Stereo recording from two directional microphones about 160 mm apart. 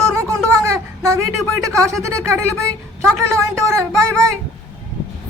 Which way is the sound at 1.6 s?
20° right (ahead or behind).